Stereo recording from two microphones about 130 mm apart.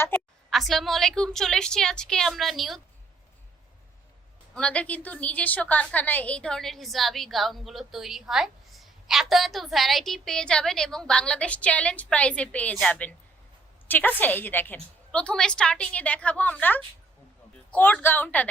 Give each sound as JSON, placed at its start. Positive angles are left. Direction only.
{"t": 0.1, "sound": "a sound", "side_deg": 15}
{"t": 0.5, "sound": "a woman's voice", "side_deg": 0}
{"t": 4.5, "sound": "a woman's voice", "side_deg": 10}